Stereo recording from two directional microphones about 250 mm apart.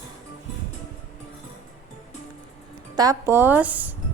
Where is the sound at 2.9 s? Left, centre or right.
Centre.